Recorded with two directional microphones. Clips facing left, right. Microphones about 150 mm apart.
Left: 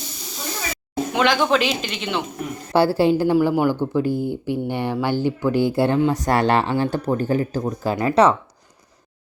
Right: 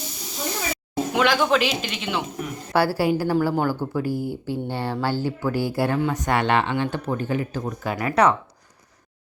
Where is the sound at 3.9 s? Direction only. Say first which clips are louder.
Left 4 dB; 20° left (ahead or behind).